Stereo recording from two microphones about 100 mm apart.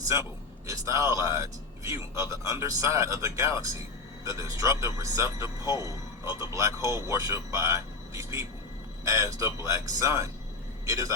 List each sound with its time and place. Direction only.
0.7 s a man's voice: 30° right (ahead or behind)